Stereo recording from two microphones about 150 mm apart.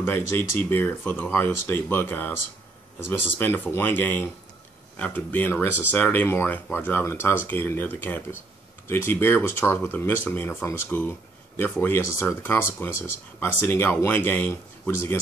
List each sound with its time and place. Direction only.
0.0 s speech: 15° left (ahead or behind)